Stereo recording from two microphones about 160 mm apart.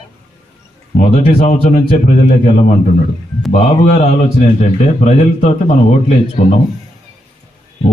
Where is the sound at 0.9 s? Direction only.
45° left (ahead or behind).